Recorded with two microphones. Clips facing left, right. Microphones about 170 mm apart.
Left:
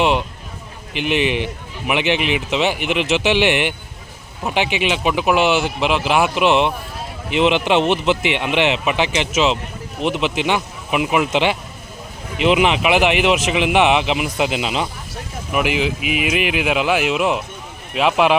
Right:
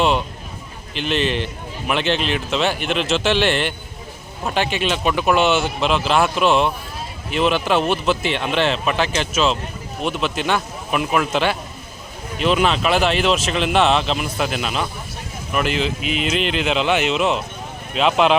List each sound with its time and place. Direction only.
0.9 s speech: 15° left (ahead or behind)